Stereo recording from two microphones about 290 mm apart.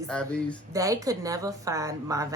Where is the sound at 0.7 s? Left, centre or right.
Centre.